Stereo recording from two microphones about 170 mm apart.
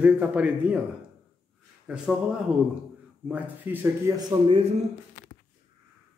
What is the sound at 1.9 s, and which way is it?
A man's voice, 5° right (ahead or behind).